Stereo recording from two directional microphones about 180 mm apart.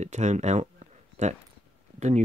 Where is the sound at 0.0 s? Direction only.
40° right (ahead or behind).